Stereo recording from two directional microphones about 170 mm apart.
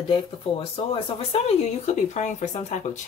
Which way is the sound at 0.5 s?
35° left (ahead or behind).